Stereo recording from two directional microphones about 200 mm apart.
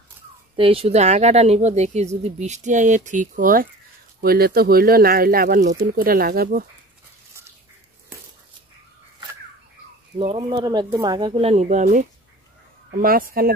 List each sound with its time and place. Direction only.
0.6 s speech: 30° right (ahead or behind); by 6.6 s 50° right (ahead or behind)
10.1 s speech: 25° right (ahead or behind); by 13.5 s 45° right (ahead or behind)